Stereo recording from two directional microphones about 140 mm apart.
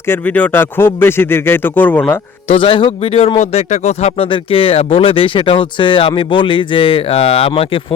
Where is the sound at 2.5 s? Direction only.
40° left (ahead or behind).